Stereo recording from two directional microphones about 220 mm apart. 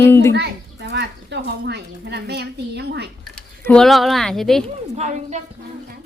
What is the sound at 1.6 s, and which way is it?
A woman's voice, 50° right (ahead or behind).